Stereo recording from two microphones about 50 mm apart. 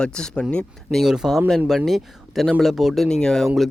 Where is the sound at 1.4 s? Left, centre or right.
Centre.